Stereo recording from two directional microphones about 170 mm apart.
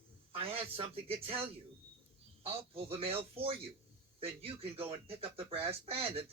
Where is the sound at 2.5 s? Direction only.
35° right (ahead or behind).